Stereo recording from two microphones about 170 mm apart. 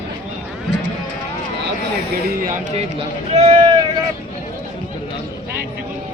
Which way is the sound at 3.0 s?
35° right (ahead or behind).